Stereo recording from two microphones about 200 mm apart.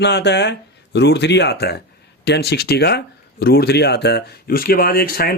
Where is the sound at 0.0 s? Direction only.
60° left (ahead or behind).